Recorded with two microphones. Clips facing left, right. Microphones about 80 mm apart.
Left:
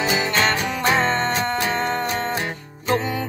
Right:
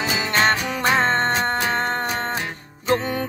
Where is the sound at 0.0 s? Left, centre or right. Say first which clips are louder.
Left 3 dB; centre.